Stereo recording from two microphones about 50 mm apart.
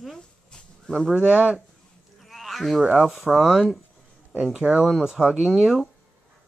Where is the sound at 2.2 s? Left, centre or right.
Centre.